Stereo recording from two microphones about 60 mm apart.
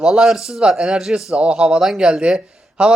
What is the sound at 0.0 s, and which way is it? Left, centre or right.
A man's voice, centre.